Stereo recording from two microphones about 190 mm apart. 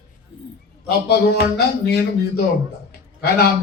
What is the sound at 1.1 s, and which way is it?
A man's voice, 60° left (ahead or behind).